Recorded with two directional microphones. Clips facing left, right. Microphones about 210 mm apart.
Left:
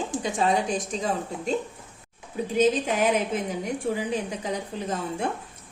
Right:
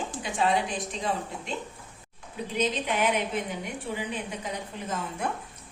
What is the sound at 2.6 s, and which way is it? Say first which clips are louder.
A woman's voice: left 5 dB; 40° left (ahead or behind).